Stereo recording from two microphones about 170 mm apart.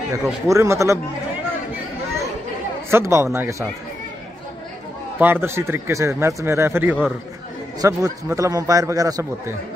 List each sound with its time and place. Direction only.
0.2 s speech: 15° right (ahead or behind)
2.9 s speech: 15° right (ahead or behind)
5.2 s a man's voice: 15° right (ahead or behind)